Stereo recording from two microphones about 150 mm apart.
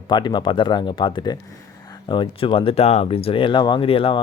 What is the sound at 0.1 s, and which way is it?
Speech, 30° left (ahead or behind).